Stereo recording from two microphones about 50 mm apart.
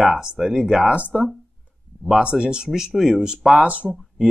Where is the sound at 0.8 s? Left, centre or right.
Right.